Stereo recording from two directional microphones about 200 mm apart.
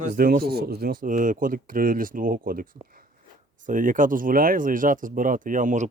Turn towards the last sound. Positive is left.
turn(degrees=-40)  # may be behind; listen again after turning